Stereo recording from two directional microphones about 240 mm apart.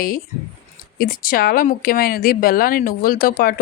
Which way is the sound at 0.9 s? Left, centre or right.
Left.